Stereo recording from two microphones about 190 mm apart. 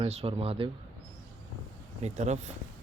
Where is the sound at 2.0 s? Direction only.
35° right (ahead or behind).